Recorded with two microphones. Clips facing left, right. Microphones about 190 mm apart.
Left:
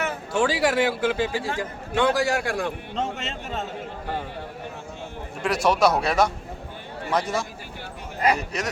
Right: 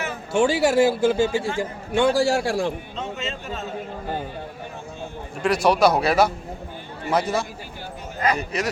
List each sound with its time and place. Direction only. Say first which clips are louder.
0.3 s speech: right 4 dB; 25° right (ahead or behind)
2.9 s a man's voice: left 1 dB; 75° left (ahead or behind)
5.4 s a man's voice: right 3 dB; centre (ahead or behind)